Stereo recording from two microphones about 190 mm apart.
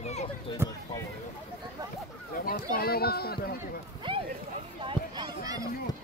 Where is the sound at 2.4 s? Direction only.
50° left (ahead or behind).